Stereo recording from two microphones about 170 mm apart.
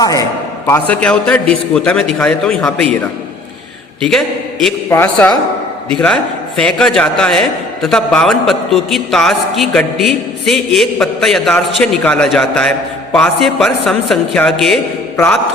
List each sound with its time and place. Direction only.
0.0 s a man's voice: 20° left (ahead or behind)
0.7 s a man's voice: 10° left (ahead or behind)
4.9 s a man's voice: 10° left (ahead or behind)